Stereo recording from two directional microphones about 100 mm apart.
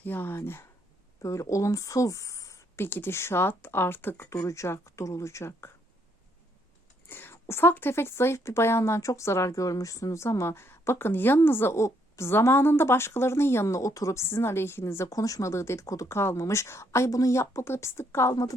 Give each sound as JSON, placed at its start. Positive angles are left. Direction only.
{"t": 0.0, "sound": "a woman's voice", "side_deg": 20}
{"t": 7.1, "sound": "a woman's voice", "side_deg": 20}